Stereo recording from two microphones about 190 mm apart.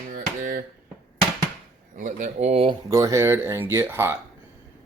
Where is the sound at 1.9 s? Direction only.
40° right (ahead or behind).